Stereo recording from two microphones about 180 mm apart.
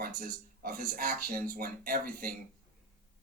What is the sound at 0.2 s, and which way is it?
Speech, 50° right (ahead or behind).